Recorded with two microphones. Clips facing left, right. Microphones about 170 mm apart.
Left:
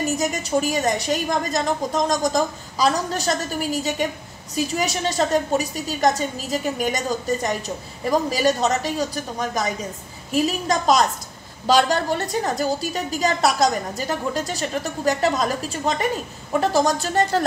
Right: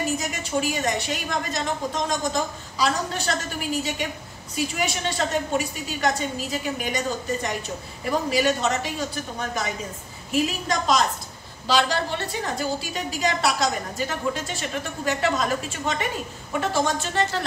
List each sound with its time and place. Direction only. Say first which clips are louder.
0.2 s a woman's voice: left 5 dB; 40° left (ahead or behind)